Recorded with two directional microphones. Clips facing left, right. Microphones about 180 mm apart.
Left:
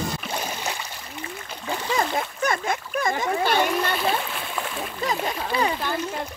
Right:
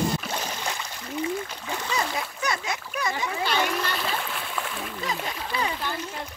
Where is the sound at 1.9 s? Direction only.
50° left (ahead or behind).